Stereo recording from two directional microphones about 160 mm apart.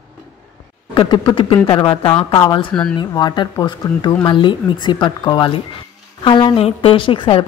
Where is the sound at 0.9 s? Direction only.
30° left (ahead or behind).